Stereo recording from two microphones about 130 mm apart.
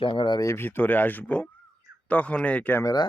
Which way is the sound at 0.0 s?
40° left (ahead or behind).